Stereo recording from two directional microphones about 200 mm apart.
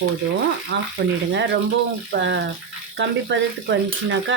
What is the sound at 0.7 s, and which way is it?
Speech, 60° right (ahead or behind).